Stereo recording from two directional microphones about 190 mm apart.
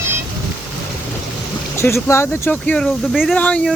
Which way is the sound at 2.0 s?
15° left (ahead or behind).